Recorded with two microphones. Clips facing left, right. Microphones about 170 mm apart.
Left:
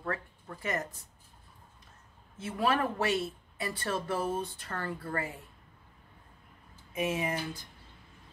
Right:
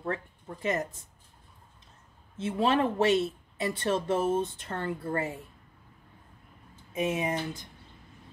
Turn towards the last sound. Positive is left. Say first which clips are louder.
# right 3 dB
turn(degrees=-25)  # may be behind; listen again after turning